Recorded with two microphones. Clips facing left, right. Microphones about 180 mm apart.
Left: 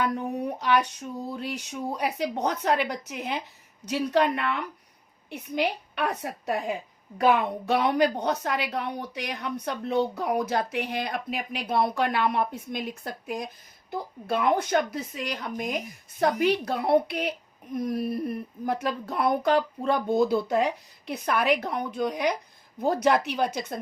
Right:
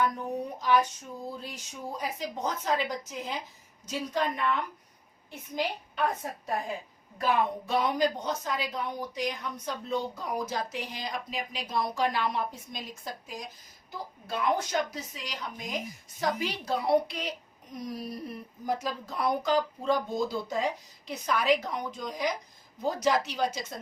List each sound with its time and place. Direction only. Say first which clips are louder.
0.0 s a woman's voice: left 2 dB; 65° left (ahead or behind)